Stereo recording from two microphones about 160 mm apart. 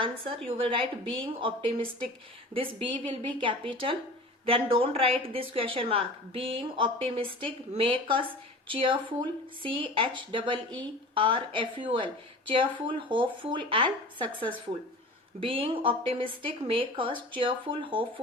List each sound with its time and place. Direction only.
0.6 s speech: 35° right (ahead or behind)